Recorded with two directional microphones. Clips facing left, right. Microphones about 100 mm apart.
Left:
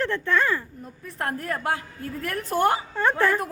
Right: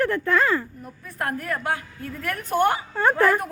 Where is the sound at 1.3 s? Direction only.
30° left (ahead or behind).